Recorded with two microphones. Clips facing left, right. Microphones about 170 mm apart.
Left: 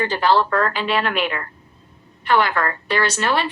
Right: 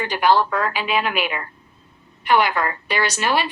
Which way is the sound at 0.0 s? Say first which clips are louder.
Even; 15° right (ahead or behind).